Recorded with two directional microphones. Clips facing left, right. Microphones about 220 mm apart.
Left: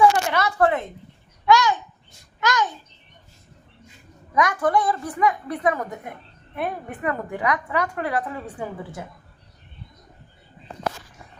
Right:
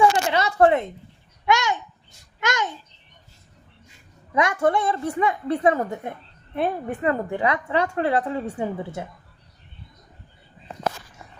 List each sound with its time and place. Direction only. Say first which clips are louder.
0.3 s a child's voice: right 3 dB; 25° right (ahead or behind)
4.4 s a woman's voice: even; 25° right (ahead or behind)